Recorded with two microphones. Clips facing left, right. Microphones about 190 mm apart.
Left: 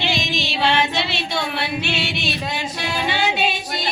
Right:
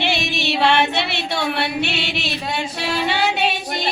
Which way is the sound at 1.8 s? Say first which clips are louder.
Right 1 dB; 65° right (ahead or behind).